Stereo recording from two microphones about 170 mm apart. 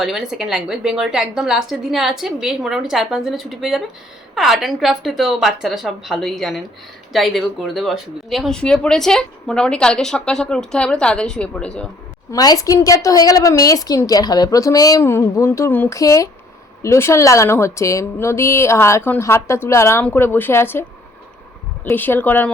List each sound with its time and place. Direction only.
0.0 s speech: centre (ahead or behind)
12.3 s a woman's voice: 20° left (ahead or behind)
21.8 s a woman's voice: 10° left (ahead or behind)